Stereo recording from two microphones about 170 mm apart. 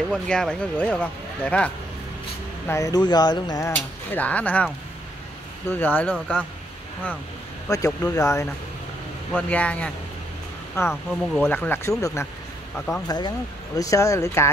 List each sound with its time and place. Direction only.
0.1 s speech: 5° left (ahead or behind)
2.7 s speech: 20° left (ahead or behind)
3.7 s speech: 10° left (ahead or behind)
5.7 s speech: 10° left (ahead or behind)
6.1 s speech: 5° right (ahead or behind)
7.6 s speech: 20° left (ahead or behind)
9.5 s speech: 10° left (ahead or behind)